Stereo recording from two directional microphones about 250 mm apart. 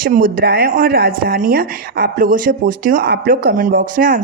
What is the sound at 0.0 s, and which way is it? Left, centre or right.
Speech, right.